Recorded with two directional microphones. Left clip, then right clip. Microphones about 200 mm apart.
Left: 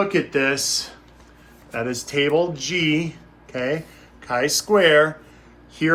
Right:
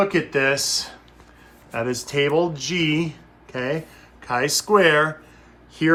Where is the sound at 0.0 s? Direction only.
35° right (ahead or behind).